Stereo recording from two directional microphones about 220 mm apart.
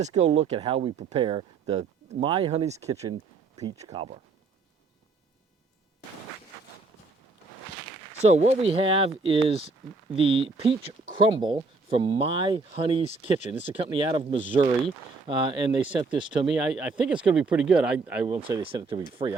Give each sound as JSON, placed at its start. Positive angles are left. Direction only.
{"t": 0.0, "sound": "speech", "side_deg": -30}
{"t": 8.2, "sound": "speech", "side_deg": -30}
{"t": 16.5, "sound": "speech", "side_deg": -5}
{"t": 18.4, "sound": "speech", "side_deg": -25}